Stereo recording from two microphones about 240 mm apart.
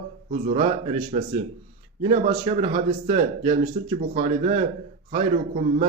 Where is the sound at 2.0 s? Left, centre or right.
Right.